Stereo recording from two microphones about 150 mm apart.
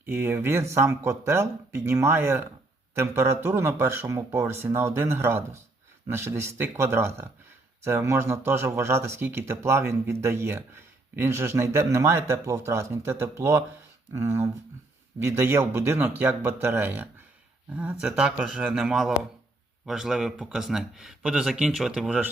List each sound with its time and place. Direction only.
0.0 s speech: 15° right (ahead or behind)